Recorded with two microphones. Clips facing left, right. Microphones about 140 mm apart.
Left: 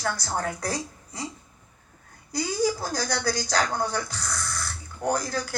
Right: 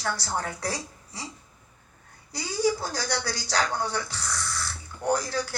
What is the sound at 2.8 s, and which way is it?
Speech, 45° left (ahead or behind).